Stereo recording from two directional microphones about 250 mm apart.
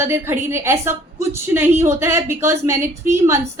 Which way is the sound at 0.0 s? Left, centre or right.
Centre.